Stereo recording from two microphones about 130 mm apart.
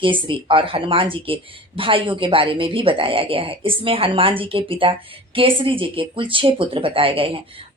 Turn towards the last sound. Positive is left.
turn(degrees=-45)  # may be behind; listen again after turning